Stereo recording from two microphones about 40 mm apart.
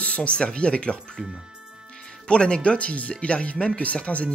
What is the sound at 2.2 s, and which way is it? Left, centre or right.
Speech, left.